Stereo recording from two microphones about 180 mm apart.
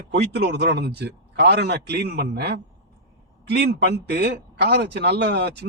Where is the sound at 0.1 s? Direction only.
65° right (ahead or behind).